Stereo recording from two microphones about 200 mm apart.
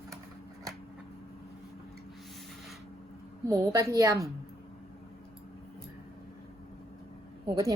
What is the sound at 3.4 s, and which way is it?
Speech, 15° right (ahead or behind).